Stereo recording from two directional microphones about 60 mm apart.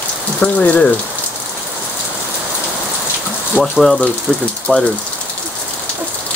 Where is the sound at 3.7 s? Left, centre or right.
Centre.